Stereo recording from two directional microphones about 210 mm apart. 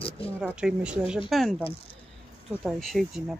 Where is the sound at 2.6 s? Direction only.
Centre (ahead or behind).